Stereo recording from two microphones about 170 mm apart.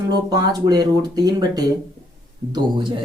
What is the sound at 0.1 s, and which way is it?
Speech, 25° right (ahead or behind).